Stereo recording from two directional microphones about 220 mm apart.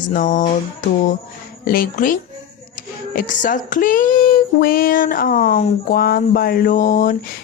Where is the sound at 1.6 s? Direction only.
40° left (ahead or behind).